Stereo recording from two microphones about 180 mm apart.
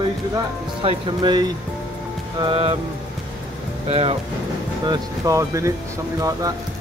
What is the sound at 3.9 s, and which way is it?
Speech, 30° right (ahead or behind).